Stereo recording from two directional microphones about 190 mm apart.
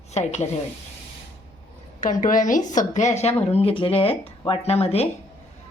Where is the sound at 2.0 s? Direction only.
45° left (ahead or behind).